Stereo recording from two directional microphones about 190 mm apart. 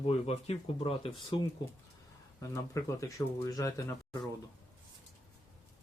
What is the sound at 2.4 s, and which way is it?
Speech, 15° left (ahead or behind).